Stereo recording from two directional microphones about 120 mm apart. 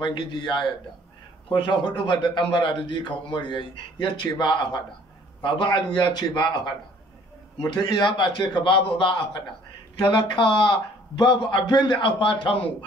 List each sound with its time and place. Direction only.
0.0 s a man's voice: 40° left (ahead or behind)